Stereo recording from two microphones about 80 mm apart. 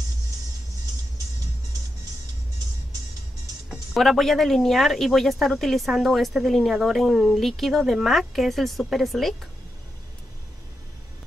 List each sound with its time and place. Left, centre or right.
3.9 s speech: centre